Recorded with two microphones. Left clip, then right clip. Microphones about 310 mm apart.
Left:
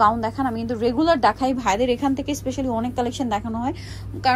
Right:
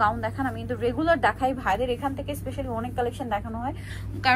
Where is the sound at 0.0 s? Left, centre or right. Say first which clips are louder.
Left 6 dB; centre.